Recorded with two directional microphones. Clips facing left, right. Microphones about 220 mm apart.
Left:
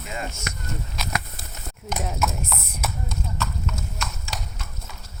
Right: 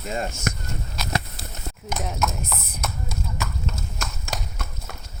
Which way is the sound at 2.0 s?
Centre (ahead or behind).